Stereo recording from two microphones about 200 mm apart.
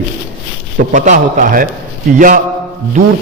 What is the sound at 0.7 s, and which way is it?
A man's voice, 40° right (ahead or behind).